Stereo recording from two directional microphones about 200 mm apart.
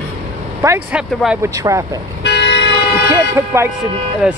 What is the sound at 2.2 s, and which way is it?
Vehicle, 60° left (ahead or behind).